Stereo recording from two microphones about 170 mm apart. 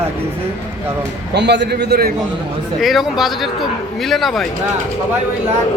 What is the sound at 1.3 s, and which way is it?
Speech, 90° right.